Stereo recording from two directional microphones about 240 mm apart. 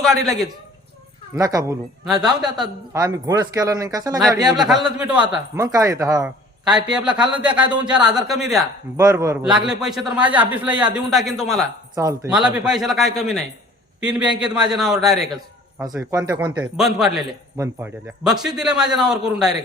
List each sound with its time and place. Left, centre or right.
0.0 s a man's voice: centre
1.4 s speech: centre
2.2 s a man's voice: centre
2.9 s speech: centre
4.5 s a man's voice: centre
6.7 s a man's voice: centre
9.0 s a man's voice: centre
11.9 s a man's voice: centre
15.8 s speech: centre
16.7 s a man's voice: centre